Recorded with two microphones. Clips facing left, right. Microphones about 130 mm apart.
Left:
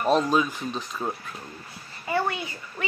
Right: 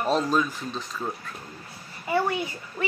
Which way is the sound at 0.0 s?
5° left (ahead or behind).